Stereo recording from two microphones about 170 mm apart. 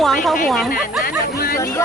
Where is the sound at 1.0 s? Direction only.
60° left (ahead or behind).